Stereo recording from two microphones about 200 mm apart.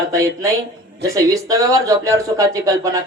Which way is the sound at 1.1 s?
15° right (ahead or behind).